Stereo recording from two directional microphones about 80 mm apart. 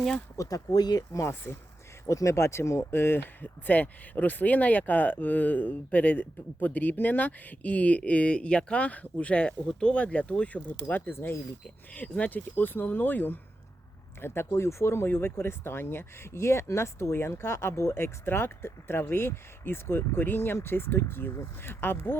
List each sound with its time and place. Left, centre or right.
0.3 s speech: left
1.1 s speech: left
11.9 s speech: centre